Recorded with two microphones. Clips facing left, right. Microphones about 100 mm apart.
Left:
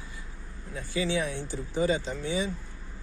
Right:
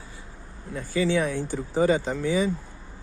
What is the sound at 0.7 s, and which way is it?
Speech, 50° right (ahead or behind).